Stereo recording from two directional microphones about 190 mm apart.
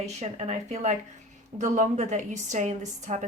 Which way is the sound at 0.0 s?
35° right (ahead or behind).